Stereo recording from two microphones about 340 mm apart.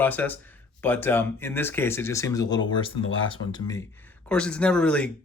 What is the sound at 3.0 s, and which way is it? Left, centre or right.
Speech, left.